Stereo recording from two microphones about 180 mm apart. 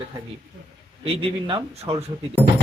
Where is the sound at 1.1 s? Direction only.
30° right (ahead or behind).